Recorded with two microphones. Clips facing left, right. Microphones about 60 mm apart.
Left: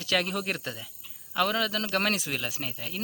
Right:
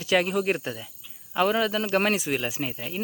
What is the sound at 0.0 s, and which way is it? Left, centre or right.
Speech, centre.